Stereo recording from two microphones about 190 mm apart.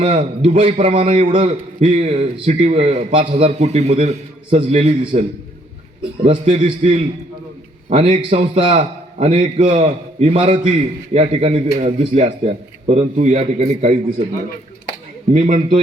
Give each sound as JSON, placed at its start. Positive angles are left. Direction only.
{"t": 0.0, "sound": "a man's voice", "side_deg": -30}
{"t": 15.3, "sound": "a man's voice", "side_deg": -40}